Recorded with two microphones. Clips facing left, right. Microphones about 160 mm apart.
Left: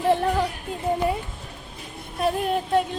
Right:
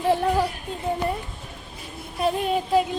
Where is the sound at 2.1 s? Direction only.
Centre (ahead or behind).